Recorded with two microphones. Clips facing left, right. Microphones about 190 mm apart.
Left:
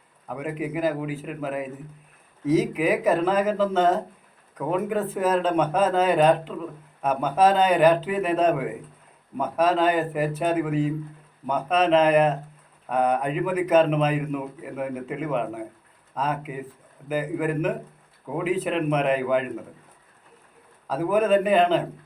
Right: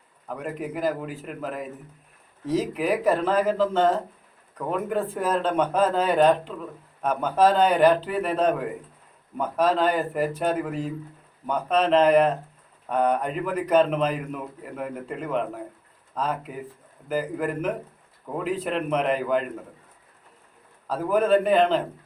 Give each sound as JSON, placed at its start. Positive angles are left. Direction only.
{"t": 0.3, "sound": "speech", "side_deg": 5}
{"t": 20.8, "sound": "speech", "side_deg": 5}